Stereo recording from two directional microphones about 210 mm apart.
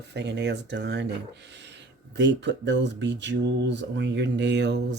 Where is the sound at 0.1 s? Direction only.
55° right (ahead or behind).